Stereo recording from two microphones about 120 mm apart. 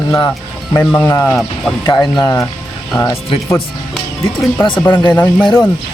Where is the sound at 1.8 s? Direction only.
35° left (ahead or behind).